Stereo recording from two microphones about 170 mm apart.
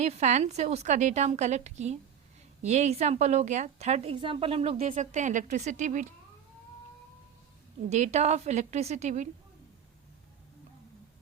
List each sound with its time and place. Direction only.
0.0 s a woman's voice: 40° right (ahead or behind)
7.9 s a woman's voice: 40° right (ahead or behind)